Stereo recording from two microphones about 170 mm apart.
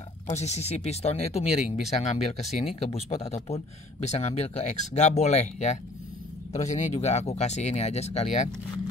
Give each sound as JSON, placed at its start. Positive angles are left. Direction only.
{"t": 0.3, "sound": "speech", "side_deg": 40}